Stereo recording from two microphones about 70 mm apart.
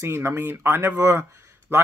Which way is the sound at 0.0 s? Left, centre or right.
Right.